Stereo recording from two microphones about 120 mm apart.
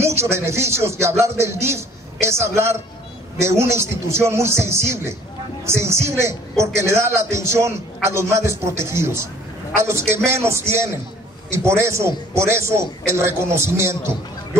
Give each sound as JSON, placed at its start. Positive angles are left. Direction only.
{"t": 0.0, "sound": "speech", "side_deg": -20}